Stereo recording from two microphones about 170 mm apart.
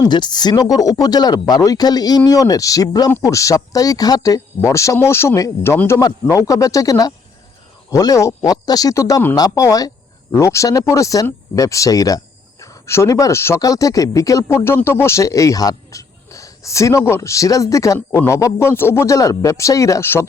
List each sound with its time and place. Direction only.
0.0 s speech: 25° left (ahead or behind)